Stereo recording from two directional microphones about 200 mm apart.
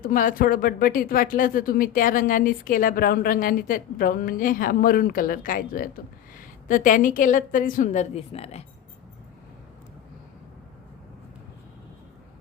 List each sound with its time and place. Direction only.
0.0 s a woman's voice: 45° left (ahead or behind)